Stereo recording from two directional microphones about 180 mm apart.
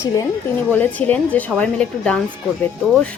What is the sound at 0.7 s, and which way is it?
A woman's voice, 10° left (ahead or behind).